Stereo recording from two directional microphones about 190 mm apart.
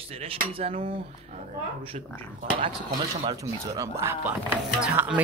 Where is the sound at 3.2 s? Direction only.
20° right (ahead or behind).